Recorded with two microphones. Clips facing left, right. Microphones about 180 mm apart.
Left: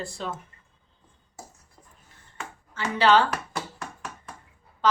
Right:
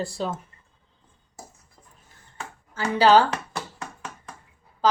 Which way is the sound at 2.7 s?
40° right (ahead or behind).